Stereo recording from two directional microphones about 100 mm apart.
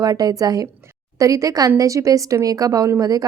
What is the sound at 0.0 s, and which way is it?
A woman's voice, 40° right (ahead or behind).